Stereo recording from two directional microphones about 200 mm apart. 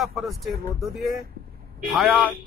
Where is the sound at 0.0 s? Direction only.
Centre (ahead or behind).